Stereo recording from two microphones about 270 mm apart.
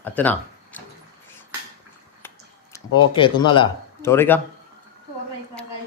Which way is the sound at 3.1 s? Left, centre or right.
Centre.